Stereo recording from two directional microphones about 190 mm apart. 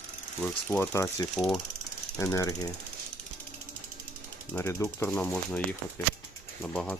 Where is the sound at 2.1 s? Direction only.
15° left (ahead or behind).